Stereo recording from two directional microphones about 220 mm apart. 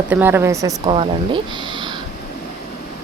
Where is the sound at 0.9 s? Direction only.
20° right (ahead or behind).